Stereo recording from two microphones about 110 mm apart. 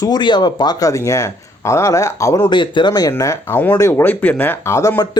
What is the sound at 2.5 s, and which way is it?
Speech, 45° left (ahead or behind).